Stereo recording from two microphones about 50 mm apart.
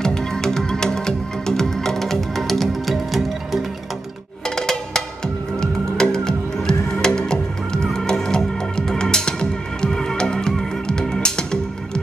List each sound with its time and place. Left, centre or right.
0.0 s music: centre
4.6 s cowbell: centre
5.6 s music: centre